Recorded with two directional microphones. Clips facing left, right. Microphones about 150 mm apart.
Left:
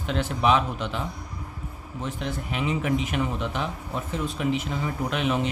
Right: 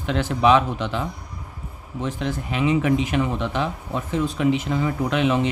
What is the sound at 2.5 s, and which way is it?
Speech, 90° right.